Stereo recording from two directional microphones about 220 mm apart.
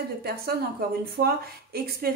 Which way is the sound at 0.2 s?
45° right (ahead or behind).